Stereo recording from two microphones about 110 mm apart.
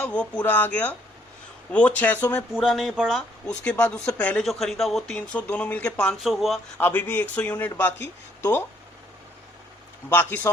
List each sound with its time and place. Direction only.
0.0 s speech: 10° left (ahead or behind)
2.5 s speech: centre (ahead or behind)
6.2 s speech: 5° right (ahead or behind)
6.7 s speech: 15° left (ahead or behind)
10.1 s speech: 15° left (ahead or behind)